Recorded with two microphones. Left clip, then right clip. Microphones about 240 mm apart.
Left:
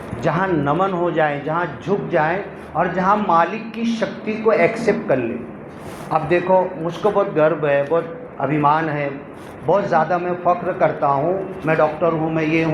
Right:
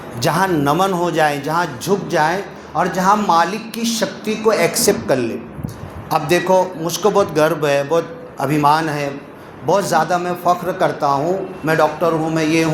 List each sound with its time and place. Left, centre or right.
0.2 s a man's voice: right